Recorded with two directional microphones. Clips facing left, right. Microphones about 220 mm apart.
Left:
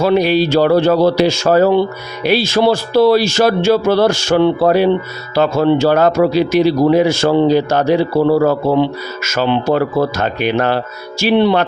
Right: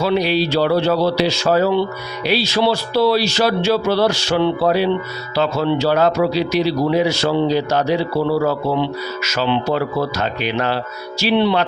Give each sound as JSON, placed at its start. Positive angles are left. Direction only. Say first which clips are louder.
{"t": 0.0, "sound": "speech", "louder": "left 5 dB", "side_deg": 50}